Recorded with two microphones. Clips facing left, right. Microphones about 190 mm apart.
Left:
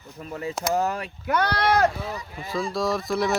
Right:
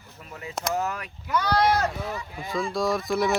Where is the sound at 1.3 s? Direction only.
65° left (ahead or behind).